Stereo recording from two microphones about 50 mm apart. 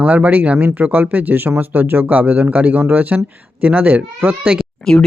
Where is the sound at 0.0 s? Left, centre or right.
Right.